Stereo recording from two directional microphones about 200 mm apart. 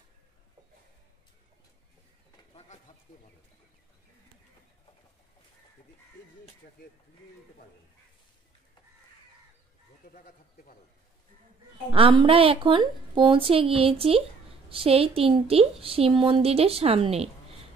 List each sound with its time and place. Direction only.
10.0 s speech: 45° left (ahead or behind)
11.9 s a woman's voice: 25° right (ahead or behind)